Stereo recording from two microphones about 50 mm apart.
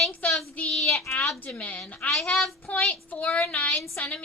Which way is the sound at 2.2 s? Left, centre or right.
Centre.